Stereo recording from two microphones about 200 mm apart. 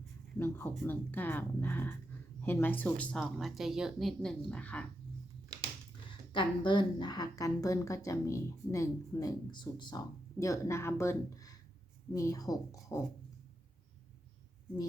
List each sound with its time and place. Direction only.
0.3 s a woman's voice: 10° left (ahead or behind)
6.3 s a woman's voice: 25° left (ahead or behind)